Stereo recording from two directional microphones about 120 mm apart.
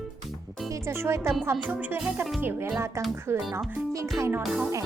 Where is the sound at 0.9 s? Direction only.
25° right (ahead or behind).